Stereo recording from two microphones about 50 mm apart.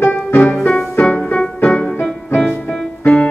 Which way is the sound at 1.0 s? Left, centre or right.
Left.